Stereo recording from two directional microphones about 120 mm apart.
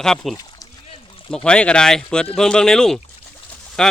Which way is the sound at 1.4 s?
10° left (ahead or behind).